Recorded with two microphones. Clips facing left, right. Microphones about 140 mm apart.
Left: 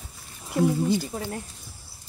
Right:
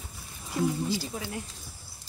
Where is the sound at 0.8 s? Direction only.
55° left (ahead or behind).